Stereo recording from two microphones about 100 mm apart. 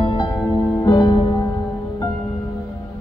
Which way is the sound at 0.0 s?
55° left (ahead or behind).